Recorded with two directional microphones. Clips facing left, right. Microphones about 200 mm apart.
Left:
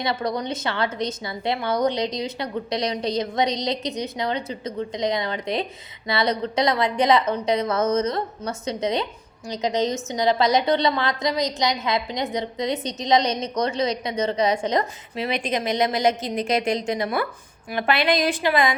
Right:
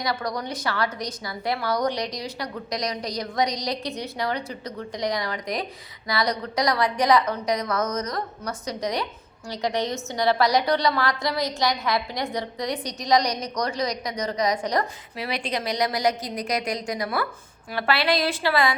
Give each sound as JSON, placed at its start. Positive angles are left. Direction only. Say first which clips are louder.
{"t": 0.0, "sound": "a woman's voice", "louder": "left 3 dB", "side_deg": 25}